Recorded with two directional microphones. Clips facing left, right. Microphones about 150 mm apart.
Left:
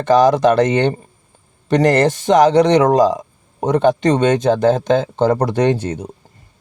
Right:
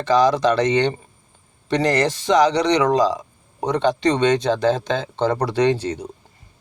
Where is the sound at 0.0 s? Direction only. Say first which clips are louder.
Left 5 dB; 50° left (ahead or behind).